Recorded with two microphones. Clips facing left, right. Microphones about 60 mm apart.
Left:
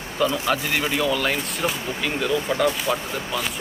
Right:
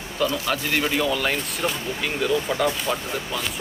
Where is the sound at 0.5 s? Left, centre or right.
Centre.